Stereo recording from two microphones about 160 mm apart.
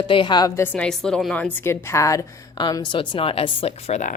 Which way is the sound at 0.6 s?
5° left (ahead or behind).